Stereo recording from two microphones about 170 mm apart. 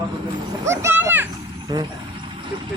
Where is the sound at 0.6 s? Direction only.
15° right (ahead or behind).